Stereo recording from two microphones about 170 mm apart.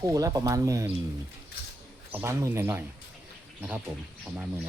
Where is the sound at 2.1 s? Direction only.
15° right (ahead or behind).